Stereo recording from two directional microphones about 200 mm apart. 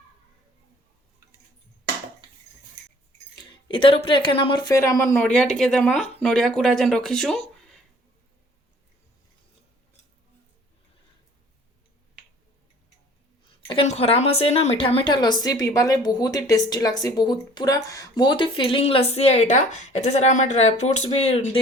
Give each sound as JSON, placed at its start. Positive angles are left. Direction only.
{"t": 3.3, "sound": "speech", "side_deg": 25}
{"t": 13.7, "sound": "a woman's voice", "side_deg": 30}